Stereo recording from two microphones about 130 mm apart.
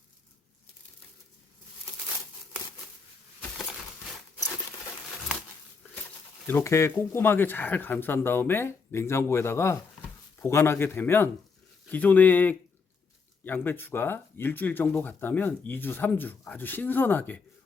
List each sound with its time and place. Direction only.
6.4 s speech: 15° left (ahead or behind)